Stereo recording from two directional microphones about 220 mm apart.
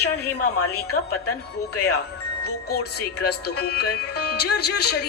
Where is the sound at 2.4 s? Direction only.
45° left (ahead or behind).